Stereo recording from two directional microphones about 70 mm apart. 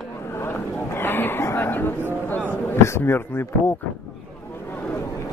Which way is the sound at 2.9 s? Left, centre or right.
Left.